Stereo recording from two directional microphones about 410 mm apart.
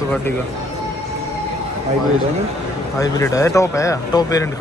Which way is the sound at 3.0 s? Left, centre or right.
Centre.